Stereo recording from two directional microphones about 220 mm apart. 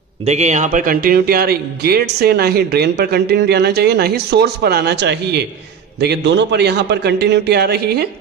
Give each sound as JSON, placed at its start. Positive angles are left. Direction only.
{"t": 0.2, "sound": "a man's voice", "side_deg": -30}